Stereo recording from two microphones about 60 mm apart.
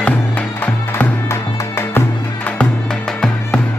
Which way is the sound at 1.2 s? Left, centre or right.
Left.